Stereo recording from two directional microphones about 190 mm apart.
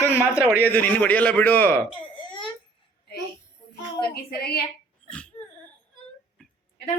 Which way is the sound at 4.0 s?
55° left (ahead or behind).